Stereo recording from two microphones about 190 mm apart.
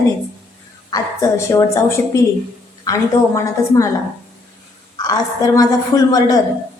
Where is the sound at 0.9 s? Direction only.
15° left (ahead or behind).